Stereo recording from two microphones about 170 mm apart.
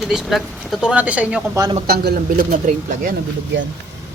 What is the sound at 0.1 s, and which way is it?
Speech, centre (ahead or behind).